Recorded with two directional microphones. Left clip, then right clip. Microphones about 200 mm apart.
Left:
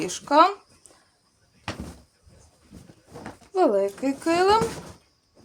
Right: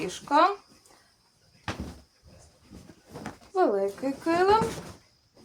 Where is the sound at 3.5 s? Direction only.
55° left (ahead or behind).